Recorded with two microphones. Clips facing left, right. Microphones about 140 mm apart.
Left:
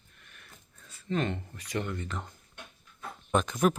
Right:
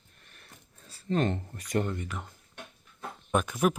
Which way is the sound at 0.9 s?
40° right (ahead or behind).